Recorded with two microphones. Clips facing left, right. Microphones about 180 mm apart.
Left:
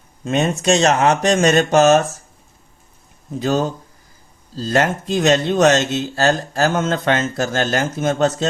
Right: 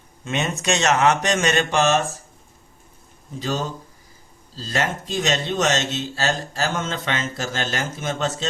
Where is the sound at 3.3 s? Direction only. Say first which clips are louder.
Left 7 dB; 50° left (ahead or behind).